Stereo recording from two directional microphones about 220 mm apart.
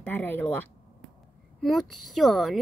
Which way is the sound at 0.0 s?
10° left (ahead or behind).